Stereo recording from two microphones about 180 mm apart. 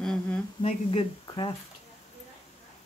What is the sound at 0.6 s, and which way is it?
Speech, 35° left (ahead or behind).